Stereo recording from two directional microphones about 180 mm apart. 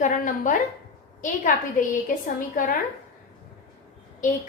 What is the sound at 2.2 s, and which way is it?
Speech, 50° left (ahead or behind).